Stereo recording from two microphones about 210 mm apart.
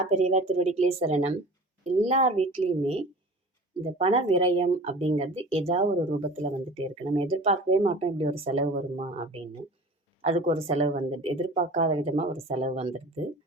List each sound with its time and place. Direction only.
0.1 s speech: 30° right (ahead or behind)
3.8 s speech: 30° right (ahead or behind)